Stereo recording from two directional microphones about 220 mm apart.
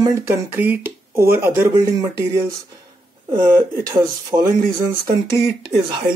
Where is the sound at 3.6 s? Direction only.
15° right (ahead or behind).